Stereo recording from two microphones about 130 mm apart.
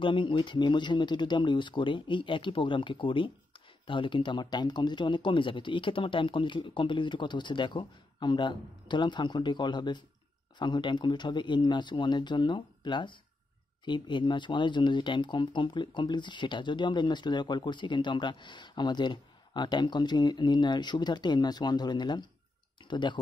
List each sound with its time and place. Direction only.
0.0 s speech: 40° left (ahead or behind)